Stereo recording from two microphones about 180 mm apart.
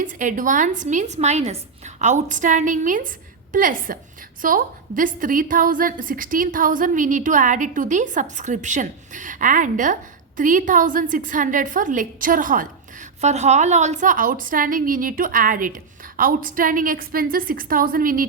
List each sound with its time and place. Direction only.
0.0 s a woman's voice: 50° right (ahead or behind)